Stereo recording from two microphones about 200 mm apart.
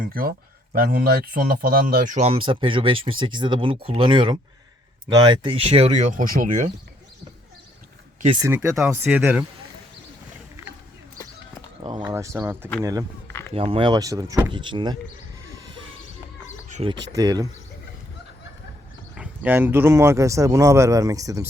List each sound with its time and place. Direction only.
0.0 s speech: 45° right (ahead or behind)
8.4 s speech: 15° right (ahead or behind)
11.8 s speech: 25° right (ahead or behind)
12.1 s speech: 15° right (ahead or behind)
13.2 s a sound: 10° left (ahead or behind)
13.5 s speech: 30° right (ahead or behind)
16.6 s chicken: 35° right (ahead or behind)
17.1 s speech: 20° right (ahead or behind)
19.1 s speech: 5° right (ahead or behind)